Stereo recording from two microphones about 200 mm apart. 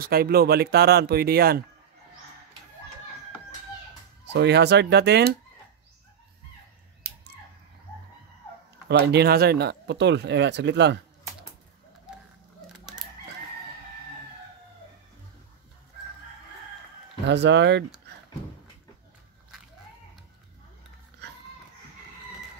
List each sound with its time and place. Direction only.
0.0 s speech: 50° right (ahead or behind)
4.3 s speech: 55° right (ahead or behind)
8.8 s speech: 55° right (ahead or behind)
17.3 s speech: 60° right (ahead or behind)